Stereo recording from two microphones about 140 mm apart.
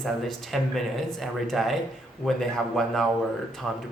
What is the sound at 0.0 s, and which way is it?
Speech, 5° left (ahead or behind).